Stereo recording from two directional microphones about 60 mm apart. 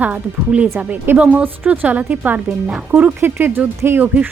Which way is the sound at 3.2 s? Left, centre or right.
Right.